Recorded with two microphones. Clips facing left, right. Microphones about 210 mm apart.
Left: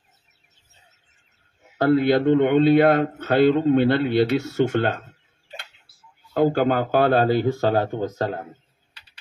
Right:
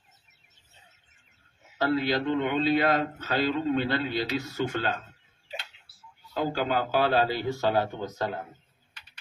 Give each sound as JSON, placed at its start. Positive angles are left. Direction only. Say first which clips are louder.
{"t": 1.8, "sound": "a man's voice", "louder": "left 8 dB", "side_deg": 55}
{"t": 6.3, "sound": "speech", "louder": "left 8 dB", "side_deg": 55}